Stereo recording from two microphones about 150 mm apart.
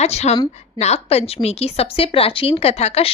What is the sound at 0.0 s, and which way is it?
A woman's voice, 45° left (ahead or behind).